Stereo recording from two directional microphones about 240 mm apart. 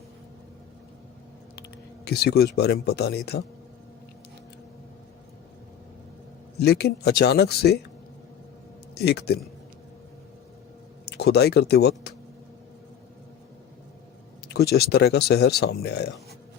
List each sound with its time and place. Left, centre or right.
2.0 s speech: left
6.6 s speech: left
9.0 s speech: left
11.0 s speech: left
14.4 s speech: left